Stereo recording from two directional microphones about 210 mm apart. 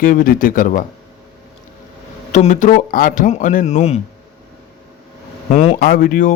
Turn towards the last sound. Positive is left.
turn(degrees=40)  # may be behind; listen again after turning